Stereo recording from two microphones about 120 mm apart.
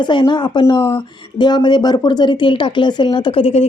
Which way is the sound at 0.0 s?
40° left (ahead or behind).